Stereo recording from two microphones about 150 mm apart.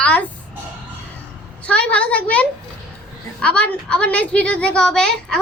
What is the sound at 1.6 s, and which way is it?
A child's voice, 10° left (ahead or behind).